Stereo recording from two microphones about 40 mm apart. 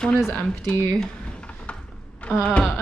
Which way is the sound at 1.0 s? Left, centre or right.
Left.